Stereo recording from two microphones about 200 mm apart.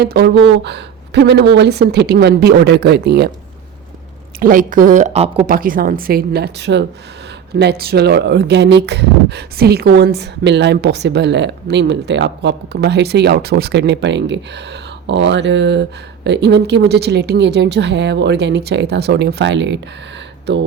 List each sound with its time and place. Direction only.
0.0 s speech: 55° right (ahead or behind)
4.4 s speech: 45° right (ahead or behind)
5.5 s a woman's voice: 45° right (ahead or behind); by 20.6 s 60° right (ahead or behind)